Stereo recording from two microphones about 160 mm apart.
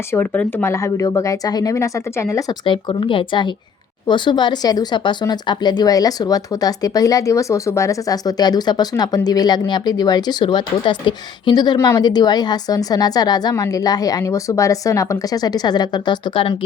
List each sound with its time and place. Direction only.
0.1 s speech: 15° left (ahead or behind); by 16.6 s 30° left (ahead or behind)